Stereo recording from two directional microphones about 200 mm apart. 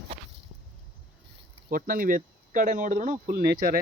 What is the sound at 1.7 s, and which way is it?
Speech, 45° right (ahead or behind).